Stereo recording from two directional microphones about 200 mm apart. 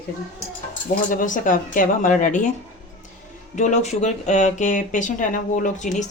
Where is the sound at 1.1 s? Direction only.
40° left (ahead or behind).